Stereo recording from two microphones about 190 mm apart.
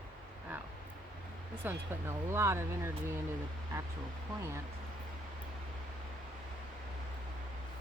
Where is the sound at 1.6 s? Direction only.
10° right (ahead or behind).